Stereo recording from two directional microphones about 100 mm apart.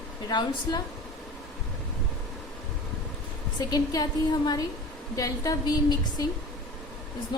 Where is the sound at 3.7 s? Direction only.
45° left (ahead or behind).